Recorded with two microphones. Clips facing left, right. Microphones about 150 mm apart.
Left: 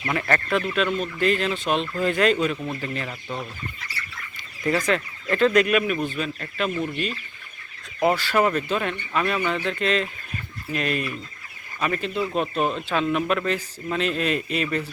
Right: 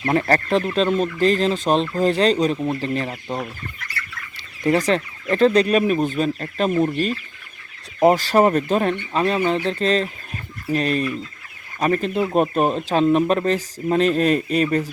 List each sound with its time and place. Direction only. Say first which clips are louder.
0.0 s speech: right 6 dB; 35° right (ahead or behind)
4.9 s speech: right 4 dB; 35° right (ahead or behind)